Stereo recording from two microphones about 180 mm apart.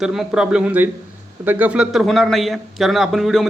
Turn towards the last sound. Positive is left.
turn(degrees=0)  # may be behind; listen again after turning